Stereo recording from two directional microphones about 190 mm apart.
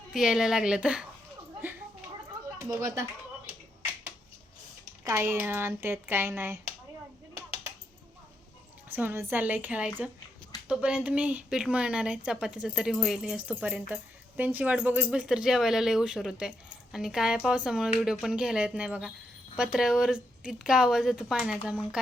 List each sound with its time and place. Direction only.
0.1 s speech: centre (ahead or behind)
2.6 s speech: 15° right (ahead or behind)
5.0 s speech: 15° right (ahead or behind)
8.9 s speech: 10° right (ahead or behind)